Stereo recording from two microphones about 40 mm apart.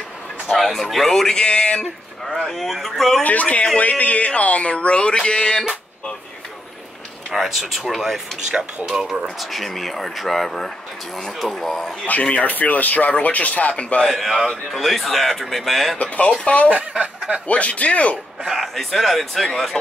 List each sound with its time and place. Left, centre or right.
0.6 s speech: centre; by 1.9 s left
2.3 s speech: centre
3.3 s speech: left
7.3 s speech: centre
9.5 s speech: centre
11.7 s speech: centre
12.1 s speech: left
14.5 s speech: centre
16.0 s speech: left
17.0 s speech: right
17.5 s speech: left
18.6 s speech: centre